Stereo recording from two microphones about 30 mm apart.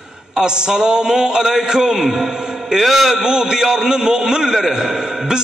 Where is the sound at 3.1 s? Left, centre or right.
Right.